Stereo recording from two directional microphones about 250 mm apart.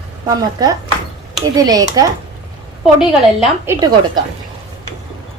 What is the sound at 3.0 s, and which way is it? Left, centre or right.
Speech, centre.